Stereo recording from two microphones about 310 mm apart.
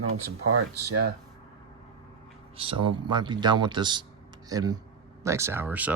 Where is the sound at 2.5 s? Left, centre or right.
Centre.